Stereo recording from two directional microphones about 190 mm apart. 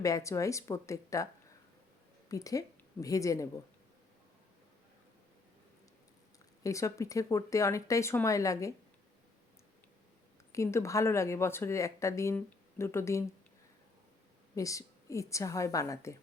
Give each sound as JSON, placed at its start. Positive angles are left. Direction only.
{"t": 0.0, "sound": "a woman's voice", "side_deg": 15}
{"t": 6.6, "sound": "speech", "side_deg": 15}
{"t": 10.5, "sound": "speech", "side_deg": 15}
{"t": 14.5, "sound": "speech", "side_deg": 15}